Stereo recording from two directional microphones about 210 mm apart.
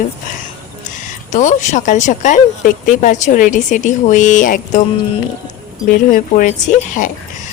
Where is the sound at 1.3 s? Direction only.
35° left (ahead or behind).